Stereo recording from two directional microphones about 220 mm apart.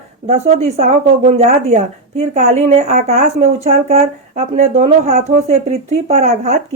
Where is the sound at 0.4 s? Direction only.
30° right (ahead or behind).